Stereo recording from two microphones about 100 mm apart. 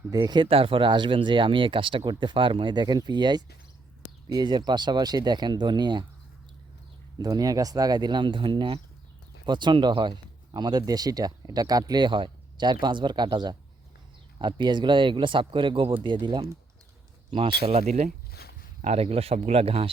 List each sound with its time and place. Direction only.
0.1 s speech: 40° right (ahead or behind)
0.4 s speech: 65° right (ahead or behind); by 6.1 s 50° right (ahead or behind)
7.2 s speech: 40° right (ahead or behind)
17.3 s speech: 70° right (ahead or behind)
18.9 s speech: 85° right